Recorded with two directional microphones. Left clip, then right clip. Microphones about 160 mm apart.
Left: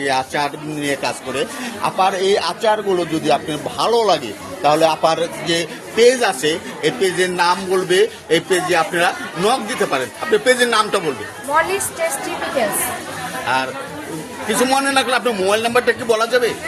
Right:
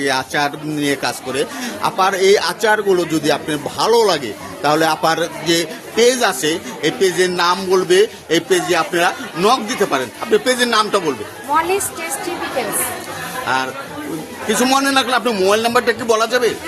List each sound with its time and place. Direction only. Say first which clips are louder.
0.0 s a man's voice: right 1 dB; 40° right (ahead or behind)
13.4 s chatter: even; 35° right (ahead or behind)
14.4 s a man's voice: right 1 dB; 35° right (ahead or behind)